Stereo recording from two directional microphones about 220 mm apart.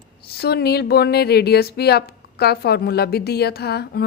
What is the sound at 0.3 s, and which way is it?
A woman's voice, 45° left (ahead or behind).